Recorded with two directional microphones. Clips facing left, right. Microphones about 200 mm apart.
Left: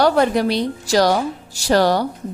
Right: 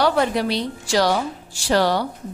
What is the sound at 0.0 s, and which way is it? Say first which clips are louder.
A woman's voice: left 4 dB; 45° left (ahead or behind).